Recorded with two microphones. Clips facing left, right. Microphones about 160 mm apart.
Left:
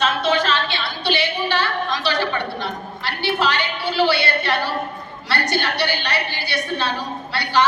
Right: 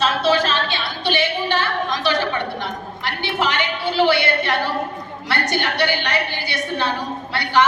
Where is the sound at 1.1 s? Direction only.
20° right (ahead or behind).